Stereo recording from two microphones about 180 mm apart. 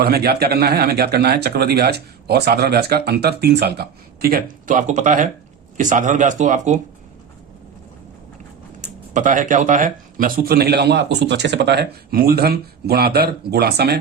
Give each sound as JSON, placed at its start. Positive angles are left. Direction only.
{"t": 0.0, "sound": "speech", "side_deg": -60}
{"t": 8.8, "sound": "speech", "side_deg": -45}